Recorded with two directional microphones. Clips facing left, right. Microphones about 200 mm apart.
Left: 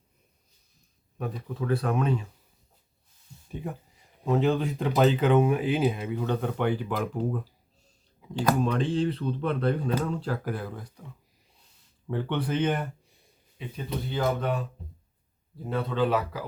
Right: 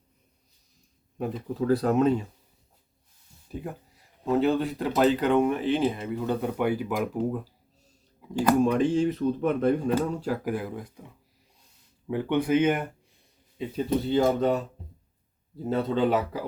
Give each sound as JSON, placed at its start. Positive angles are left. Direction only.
{"t": 1.2, "sound": "speech", "side_deg": -30}
{"t": 3.5, "sound": "a sound", "side_deg": 0}
{"t": 4.3, "sound": "speech", "side_deg": 0}
{"t": 13.6, "sound": "speech", "side_deg": -30}
{"t": 15.6, "sound": "speech", "side_deg": -25}